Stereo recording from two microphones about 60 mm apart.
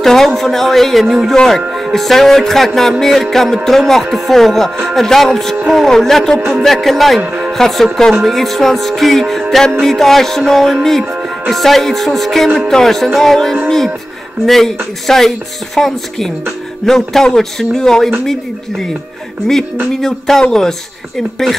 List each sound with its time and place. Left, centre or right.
0.0 s speech: centre
1.8 s music: centre
7.2 s speech: right
7.5 s music: centre
16.8 s speech: centre
18.2 s music: centre
19.4 s speech: centre